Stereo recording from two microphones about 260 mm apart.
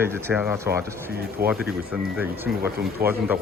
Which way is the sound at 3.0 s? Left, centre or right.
Right.